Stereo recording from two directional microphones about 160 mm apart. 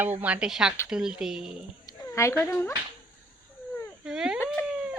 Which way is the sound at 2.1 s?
15° left (ahead or behind).